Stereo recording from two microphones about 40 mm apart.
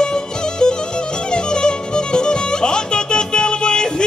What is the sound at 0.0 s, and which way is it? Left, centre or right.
Music, centre.